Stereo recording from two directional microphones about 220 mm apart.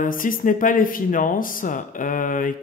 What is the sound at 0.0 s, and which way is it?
Speech, 40° left (ahead or behind).